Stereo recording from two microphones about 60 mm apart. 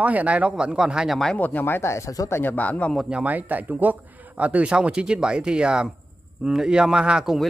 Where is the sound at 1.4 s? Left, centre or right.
Left.